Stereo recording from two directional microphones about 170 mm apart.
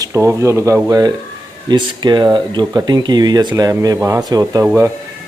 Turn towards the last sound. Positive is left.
turn(degrees=-10)  # may be behind; listen again after turning